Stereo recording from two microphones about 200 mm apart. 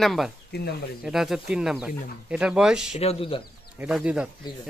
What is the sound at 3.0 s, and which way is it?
Speech, 30° left (ahead or behind).